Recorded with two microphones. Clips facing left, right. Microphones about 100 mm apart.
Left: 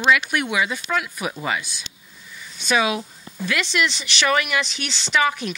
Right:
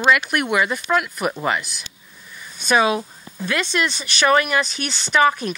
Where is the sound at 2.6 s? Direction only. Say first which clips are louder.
Right 3 dB; 45° right (ahead or behind).